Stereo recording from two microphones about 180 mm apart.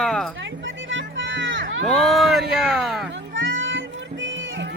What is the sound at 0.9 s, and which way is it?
Music, 90° right.